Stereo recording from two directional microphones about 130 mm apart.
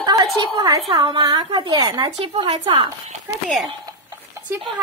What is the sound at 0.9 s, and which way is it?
A woman's voice, 40° right (ahead or behind).